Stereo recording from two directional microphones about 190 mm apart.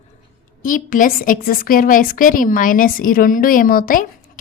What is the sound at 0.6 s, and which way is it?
Speech, 45° left (ahead or behind).